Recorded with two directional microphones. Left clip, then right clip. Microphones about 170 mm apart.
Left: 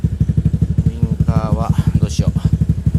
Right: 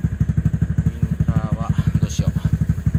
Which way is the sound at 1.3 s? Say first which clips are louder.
Left 8 dB; 30° left (ahead or behind).